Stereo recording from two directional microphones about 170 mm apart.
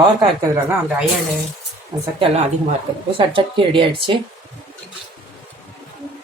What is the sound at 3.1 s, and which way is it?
Speech, 30° right (ahead or behind).